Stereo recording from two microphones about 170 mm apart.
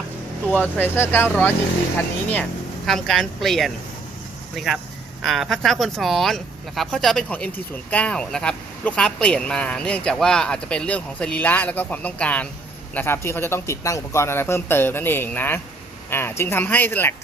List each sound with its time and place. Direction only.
0.5 s speech: 10° left (ahead or behind)